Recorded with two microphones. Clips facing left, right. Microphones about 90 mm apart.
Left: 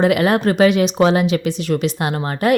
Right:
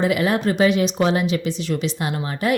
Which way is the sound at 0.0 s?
65° left (ahead or behind).